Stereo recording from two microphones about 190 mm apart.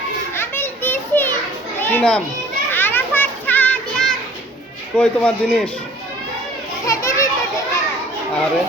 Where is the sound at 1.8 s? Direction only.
10° left (ahead or behind).